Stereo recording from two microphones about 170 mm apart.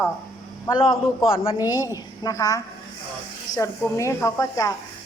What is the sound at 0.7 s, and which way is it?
A woman's voice, 30° left (ahead or behind).